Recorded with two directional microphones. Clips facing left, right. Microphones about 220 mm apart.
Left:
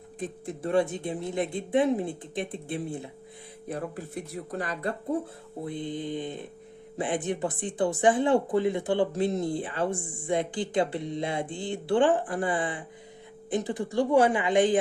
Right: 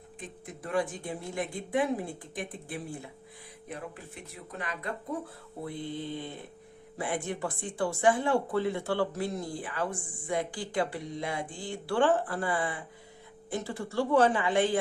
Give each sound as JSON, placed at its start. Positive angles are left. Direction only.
{"t": 0.2, "sound": "speech", "side_deg": 30}
{"t": 3.7, "sound": "speech", "side_deg": 40}
{"t": 5.6, "sound": "a woman's voice", "side_deg": 20}